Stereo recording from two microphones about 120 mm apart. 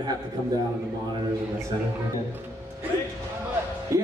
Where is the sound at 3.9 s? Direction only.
25° right (ahead or behind).